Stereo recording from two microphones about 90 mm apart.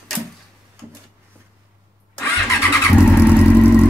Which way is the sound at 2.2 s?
30° left (ahead or behind).